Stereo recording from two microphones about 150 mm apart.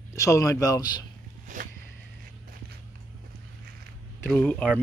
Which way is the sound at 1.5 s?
60° right (ahead or behind).